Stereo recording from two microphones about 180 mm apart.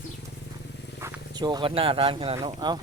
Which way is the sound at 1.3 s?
25° right (ahead or behind).